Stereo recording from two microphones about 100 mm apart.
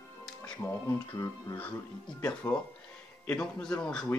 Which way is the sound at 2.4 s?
35° left (ahead or behind).